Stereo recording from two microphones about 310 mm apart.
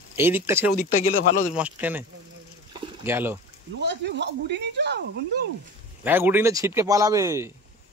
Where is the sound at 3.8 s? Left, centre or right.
Right.